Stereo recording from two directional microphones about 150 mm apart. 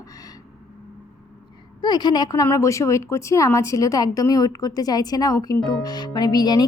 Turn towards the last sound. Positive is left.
turn(degrees=25)  # may be behind; listen again after turning